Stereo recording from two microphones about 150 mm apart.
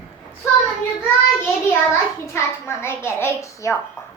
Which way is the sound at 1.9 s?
15° left (ahead or behind).